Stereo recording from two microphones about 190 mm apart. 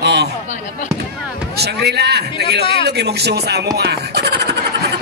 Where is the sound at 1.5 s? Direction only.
60° right (ahead or behind).